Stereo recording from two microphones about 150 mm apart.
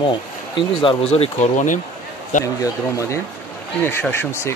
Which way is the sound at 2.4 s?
20° left (ahead or behind).